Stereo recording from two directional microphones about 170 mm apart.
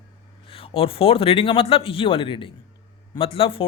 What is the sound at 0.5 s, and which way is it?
Speech, 35° left (ahead or behind).